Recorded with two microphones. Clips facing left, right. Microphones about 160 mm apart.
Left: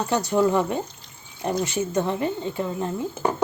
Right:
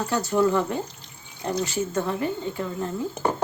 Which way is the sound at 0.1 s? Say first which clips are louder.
Left 1 dB; 20° left (ahead or behind).